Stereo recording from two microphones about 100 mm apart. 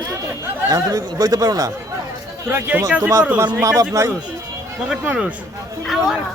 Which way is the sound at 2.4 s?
20° right (ahead or behind).